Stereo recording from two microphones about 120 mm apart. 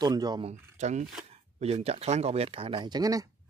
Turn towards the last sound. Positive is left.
turn(degrees=-30)  # may be behind; listen again after turning